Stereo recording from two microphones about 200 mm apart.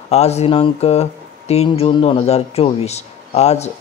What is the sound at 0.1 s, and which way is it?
Speech, 30° left (ahead or behind).